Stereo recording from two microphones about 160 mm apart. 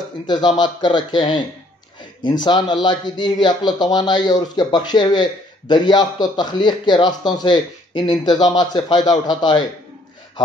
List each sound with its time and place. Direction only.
0.3 s speech: 25° left (ahead or behind)